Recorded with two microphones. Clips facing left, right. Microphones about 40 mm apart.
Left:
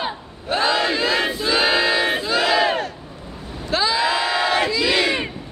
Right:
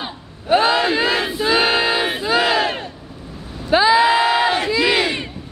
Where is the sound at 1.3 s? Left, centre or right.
Centre.